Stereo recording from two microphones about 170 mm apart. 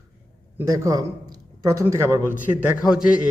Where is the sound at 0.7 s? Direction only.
20° right (ahead or behind).